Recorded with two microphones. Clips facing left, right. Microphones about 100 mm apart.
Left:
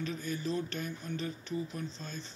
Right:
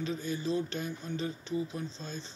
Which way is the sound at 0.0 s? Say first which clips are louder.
Right 2 dB; 20° right (ahead or behind).